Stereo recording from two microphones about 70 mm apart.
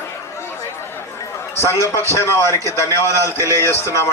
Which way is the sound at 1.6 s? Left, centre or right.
Left.